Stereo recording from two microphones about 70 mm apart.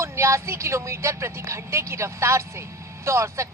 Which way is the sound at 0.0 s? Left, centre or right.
Right.